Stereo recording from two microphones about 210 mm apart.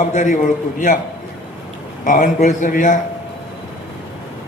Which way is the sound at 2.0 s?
40° left (ahead or behind).